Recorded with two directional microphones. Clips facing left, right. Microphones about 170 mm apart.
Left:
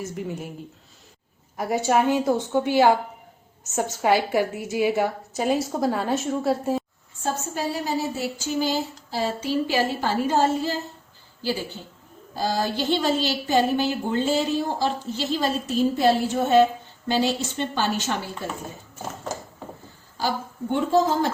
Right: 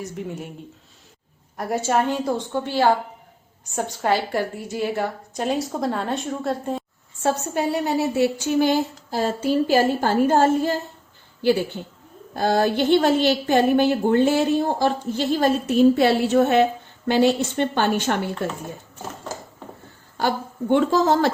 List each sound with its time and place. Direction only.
0.0 s a woman's voice: centre (ahead or behind)
1.5 s a woman's voice: centre (ahead or behind)
7.2 s a woman's voice: 70° right (ahead or behind); by 10.8 s 50° right (ahead or behind)
12.4 s a woman's voice: 60° right (ahead or behind)
20.1 s a woman's voice: 70° right (ahead or behind)